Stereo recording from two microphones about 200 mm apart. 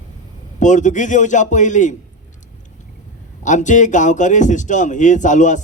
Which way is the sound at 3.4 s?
40° left (ahead or behind).